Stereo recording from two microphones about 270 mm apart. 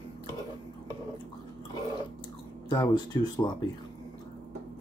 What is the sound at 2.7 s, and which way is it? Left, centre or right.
Speech, centre.